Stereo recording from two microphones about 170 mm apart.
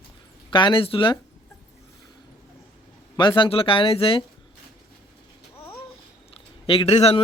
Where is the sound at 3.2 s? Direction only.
30° left (ahead or behind).